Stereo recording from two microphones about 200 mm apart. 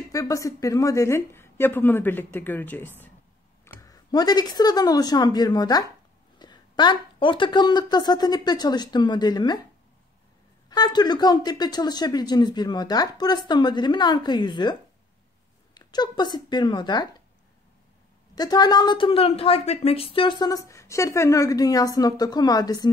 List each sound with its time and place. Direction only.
0.1 s a woman's voice: 15° left (ahead or behind)
10.7 s a woman's voice: 20° left (ahead or behind)
18.3 s a woman's voice: 20° left (ahead or behind)